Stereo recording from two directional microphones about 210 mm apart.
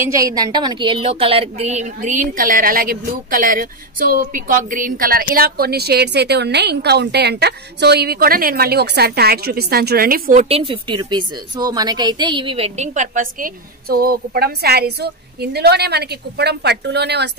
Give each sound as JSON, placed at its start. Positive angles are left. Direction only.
{"t": 0.0, "sound": "a woman's voice", "side_deg": -15}
{"t": 10.5, "sound": "a woman's voice", "side_deg": -25}